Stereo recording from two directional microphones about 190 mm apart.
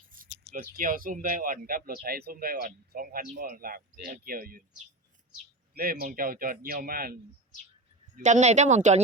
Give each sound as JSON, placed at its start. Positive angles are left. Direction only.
{"t": 0.1, "sound": "a sound", "side_deg": -45}
{"t": 0.8, "sound": "speech", "side_deg": -45}
{"t": 5.7, "sound": "speech", "side_deg": -50}
{"t": 8.1, "sound": "speech", "side_deg": -40}